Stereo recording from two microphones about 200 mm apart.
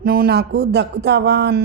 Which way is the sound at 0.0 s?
50° right (ahead or behind).